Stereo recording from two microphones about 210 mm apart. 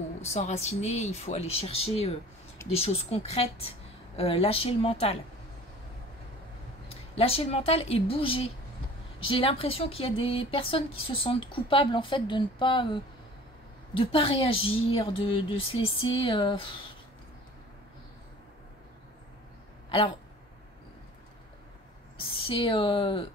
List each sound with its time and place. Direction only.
0.2 s speech: 30° left (ahead or behind)
6.9 s speech: 30° left (ahead or behind)
22.3 s speech: 25° left (ahead or behind)